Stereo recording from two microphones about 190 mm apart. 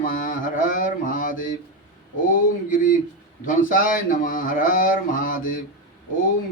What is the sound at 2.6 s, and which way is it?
Speech, 45° left (ahead or behind).